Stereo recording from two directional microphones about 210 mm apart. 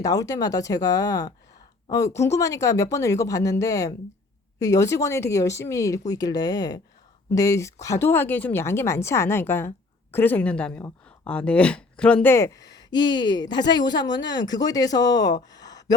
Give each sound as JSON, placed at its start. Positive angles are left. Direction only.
{"t": 0.0, "sound": "speech", "side_deg": 15}